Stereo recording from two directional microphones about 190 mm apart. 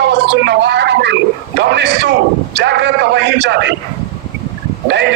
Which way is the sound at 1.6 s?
65° right (ahead or behind).